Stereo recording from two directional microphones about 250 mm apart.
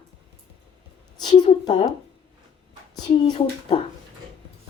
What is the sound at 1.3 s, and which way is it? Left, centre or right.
Speech, left.